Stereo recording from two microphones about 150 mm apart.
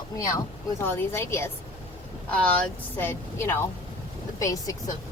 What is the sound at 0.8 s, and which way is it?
Speech, 15° left (ahead or behind).